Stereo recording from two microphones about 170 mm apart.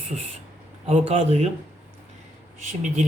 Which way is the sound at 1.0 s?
40° right (ahead or behind).